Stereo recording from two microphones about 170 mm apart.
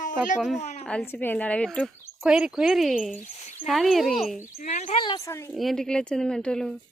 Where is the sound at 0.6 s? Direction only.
40° left (ahead or behind).